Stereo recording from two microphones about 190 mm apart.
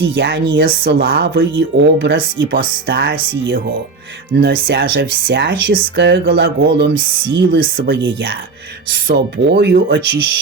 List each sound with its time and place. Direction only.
0.2 s speech: 65° right (ahead or behind)
1.5 s speech: 65° right (ahead or behind)
4.3 s speech: 60° right (ahead or behind)
9.0 s speech: 60° right (ahead or behind)